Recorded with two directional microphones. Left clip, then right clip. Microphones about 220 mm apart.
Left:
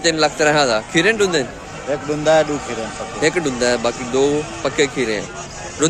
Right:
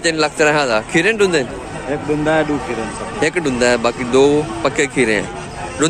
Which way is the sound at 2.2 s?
70° left (ahead or behind).